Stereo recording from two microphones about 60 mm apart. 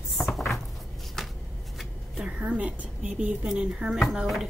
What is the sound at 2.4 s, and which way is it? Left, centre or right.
A woman's voice, right.